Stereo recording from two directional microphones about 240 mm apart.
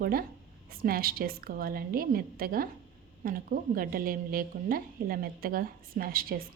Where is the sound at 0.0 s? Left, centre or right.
Right.